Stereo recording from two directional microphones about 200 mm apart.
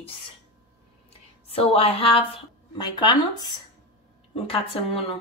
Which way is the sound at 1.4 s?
30° left (ahead or behind).